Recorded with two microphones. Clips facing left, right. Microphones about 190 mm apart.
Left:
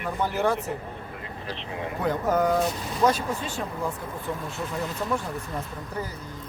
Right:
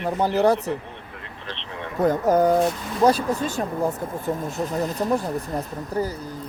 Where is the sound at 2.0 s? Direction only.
40° right (ahead or behind).